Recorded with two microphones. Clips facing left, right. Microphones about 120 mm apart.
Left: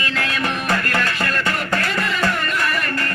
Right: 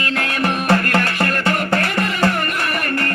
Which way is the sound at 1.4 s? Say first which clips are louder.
Right 4 dB; 35° right (ahead or behind).